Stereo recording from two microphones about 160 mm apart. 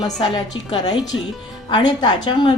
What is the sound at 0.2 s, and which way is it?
A woman's voice, 25° left (ahead or behind).